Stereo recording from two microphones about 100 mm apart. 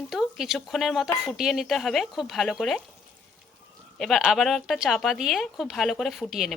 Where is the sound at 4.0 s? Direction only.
Centre (ahead or behind).